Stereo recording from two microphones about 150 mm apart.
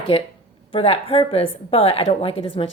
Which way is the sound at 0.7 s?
40° left (ahead or behind).